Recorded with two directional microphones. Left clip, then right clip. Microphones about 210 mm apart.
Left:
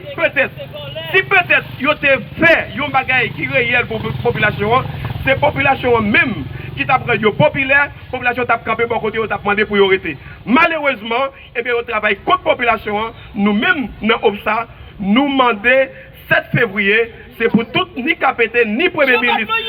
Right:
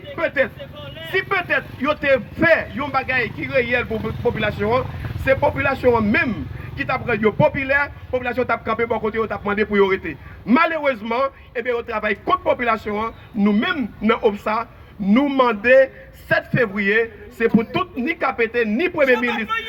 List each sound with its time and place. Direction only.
0.2 s a man's voice: 65° right (ahead or behind)